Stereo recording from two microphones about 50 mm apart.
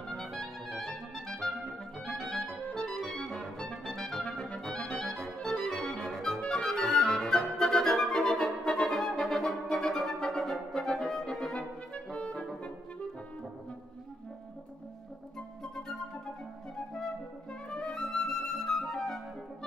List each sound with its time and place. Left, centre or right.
0.2 s clarinet: centre
2.0 s music: centre
3.1 s clarinet: centre
3.9 s clarinet: centre
4.8 s music: centre
6.1 s clarinet: centre
6.5 s music: centre
11.9 s clarinet: left
16.9 s music: centre
17.9 s flute: centre